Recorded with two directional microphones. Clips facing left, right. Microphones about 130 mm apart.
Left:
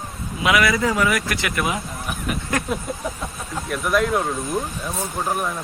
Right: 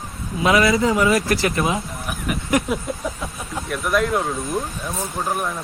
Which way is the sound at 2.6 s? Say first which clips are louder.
Right 4 dB; 15° right (ahead or behind).